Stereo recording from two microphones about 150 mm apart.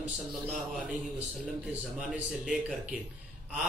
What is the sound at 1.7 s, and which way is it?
A man's voice, 5° right (ahead or behind).